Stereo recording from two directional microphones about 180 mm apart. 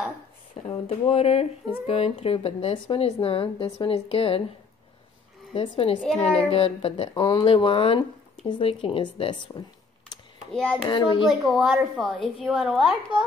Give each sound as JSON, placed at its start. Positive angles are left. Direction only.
{"t": 0.6, "sound": "speech", "side_deg": 35}
{"t": 5.5, "sound": "speech", "side_deg": 30}
{"t": 7.2, "sound": "speech", "side_deg": 20}
{"t": 10.5, "sound": "a child's voice", "side_deg": 5}
{"t": 10.8, "sound": "speech", "side_deg": 25}
{"t": 11.2, "sound": "a woman's voice", "side_deg": 0}